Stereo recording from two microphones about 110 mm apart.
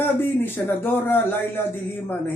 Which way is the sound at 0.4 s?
20° left (ahead or behind).